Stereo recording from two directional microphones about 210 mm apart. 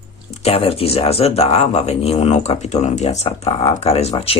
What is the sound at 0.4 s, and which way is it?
Speech, 30° left (ahead or behind).